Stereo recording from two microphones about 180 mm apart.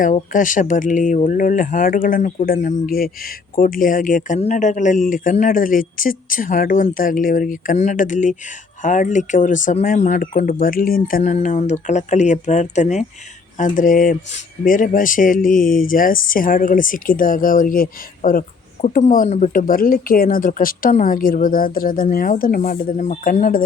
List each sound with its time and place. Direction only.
0.0 s speech: 50° left (ahead or behind)